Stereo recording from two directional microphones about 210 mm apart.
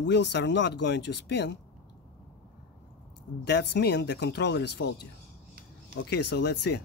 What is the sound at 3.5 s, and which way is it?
Speech, 55° left (ahead or behind).